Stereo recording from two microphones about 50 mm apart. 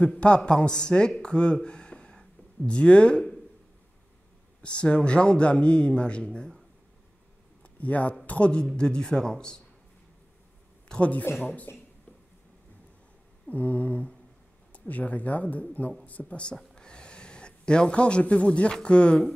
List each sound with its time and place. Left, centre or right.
0.5 s speech: centre
4.6 s a man's voice: left
7.6 s a man's voice: left; by 9.6 s centre
10.9 s a man's voice: left
13.5 s a man's voice: left